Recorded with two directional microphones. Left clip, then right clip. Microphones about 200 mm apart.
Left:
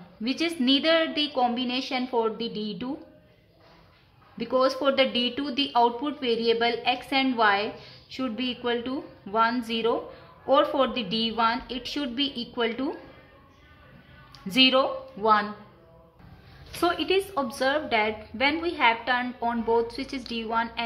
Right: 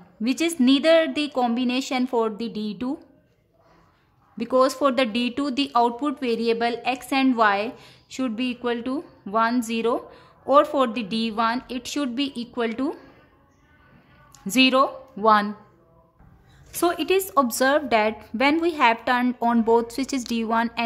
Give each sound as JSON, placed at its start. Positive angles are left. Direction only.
{"t": 0.2, "sound": "speech", "side_deg": -40}
{"t": 4.4, "sound": "speech", "side_deg": -40}
{"t": 14.3, "sound": "a woman's voice", "side_deg": -40}
{"t": 16.8, "sound": "a woman's voice", "side_deg": -45}